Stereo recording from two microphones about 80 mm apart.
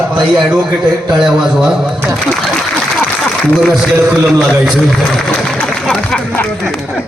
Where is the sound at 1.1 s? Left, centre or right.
Centre.